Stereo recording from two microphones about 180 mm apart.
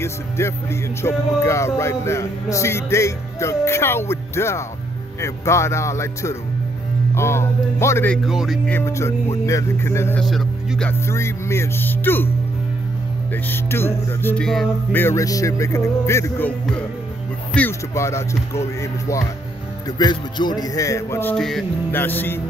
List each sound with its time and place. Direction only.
0.0 s speech: 15° left (ahead or behind)
8.3 s speech: centre (ahead or behind)
8.7 s speech: 15° left (ahead or behind)
10.2 s speech: centre (ahead or behind)
10.9 s speech: 15° left (ahead or behind)
13.3 s speech: 10° left (ahead or behind)